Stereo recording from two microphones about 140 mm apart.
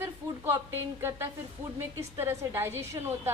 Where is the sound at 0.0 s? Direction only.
20° right (ahead or behind).